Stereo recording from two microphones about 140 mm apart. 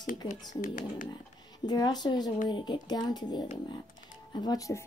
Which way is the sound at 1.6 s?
30° left (ahead or behind).